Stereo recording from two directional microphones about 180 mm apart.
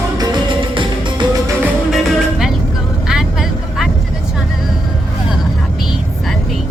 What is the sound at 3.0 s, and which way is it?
Vehicle, centre (ahead or behind).